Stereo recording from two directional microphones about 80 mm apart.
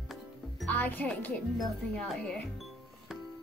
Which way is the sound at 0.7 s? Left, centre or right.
Left.